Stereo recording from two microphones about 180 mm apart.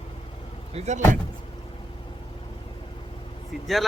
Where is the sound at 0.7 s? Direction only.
40° right (ahead or behind).